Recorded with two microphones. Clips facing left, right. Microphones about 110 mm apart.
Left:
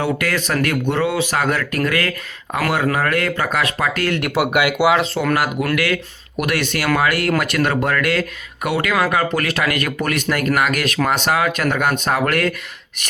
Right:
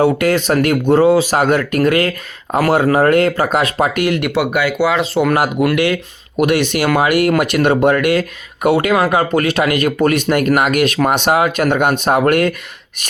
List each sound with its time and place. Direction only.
0.0 s speech: 25° right (ahead or behind)
4.5 s speech: 15° left (ahead or behind)
5.1 s speech: 20° right (ahead or behind)